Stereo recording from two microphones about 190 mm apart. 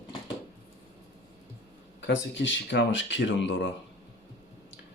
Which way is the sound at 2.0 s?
70° left (ahead or behind).